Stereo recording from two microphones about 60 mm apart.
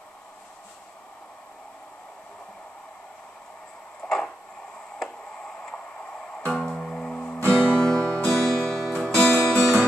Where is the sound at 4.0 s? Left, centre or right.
Centre.